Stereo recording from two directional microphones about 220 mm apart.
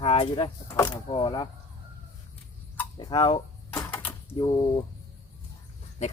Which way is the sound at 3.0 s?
20° left (ahead or behind).